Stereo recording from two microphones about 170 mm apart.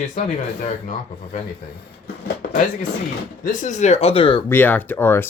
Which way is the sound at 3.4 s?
45° left (ahead or behind).